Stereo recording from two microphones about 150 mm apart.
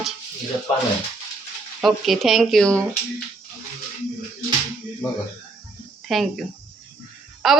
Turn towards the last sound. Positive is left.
turn(degrees=0)  # may be behind; listen again after turning